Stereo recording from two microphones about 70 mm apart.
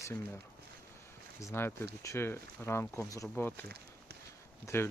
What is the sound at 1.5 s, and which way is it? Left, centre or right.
Speech, left.